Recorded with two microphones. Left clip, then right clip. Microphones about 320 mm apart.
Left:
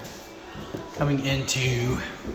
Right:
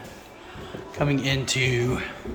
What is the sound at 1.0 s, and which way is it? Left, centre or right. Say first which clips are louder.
Speech: right 2 dB; centre.